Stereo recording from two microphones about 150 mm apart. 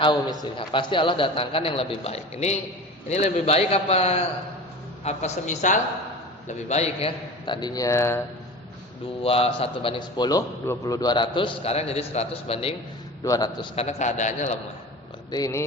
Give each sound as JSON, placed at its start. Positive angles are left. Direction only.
{"t": 0.0, "sound": "a man's voice", "side_deg": 30}
{"t": 7.4, "sound": "speech", "side_deg": 30}
{"t": 9.2, "sound": "a man's voice", "side_deg": 40}
{"t": 13.2, "sound": "speech", "side_deg": 25}
{"t": 13.7, "sound": "a man's voice", "side_deg": 50}
{"t": 15.3, "sound": "speech", "side_deg": 25}